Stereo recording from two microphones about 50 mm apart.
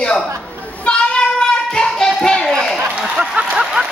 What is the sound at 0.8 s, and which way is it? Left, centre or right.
Child singing, centre.